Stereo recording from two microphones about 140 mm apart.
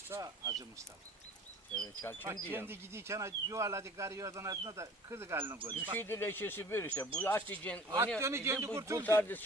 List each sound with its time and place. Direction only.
0.1 s speech: 25° right (ahead or behind)
1.7 s speech: 10° left (ahead or behind)
2.2 s speech: 15° right (ahead or behind)
5.5 s speech: 35° right (ahead or behind)
6.0 s speech: 15° left (ahead or behind)
7.9 s speech: 20° right (ahead or behind)
9.0 s speech: 15° left (ahead or behind)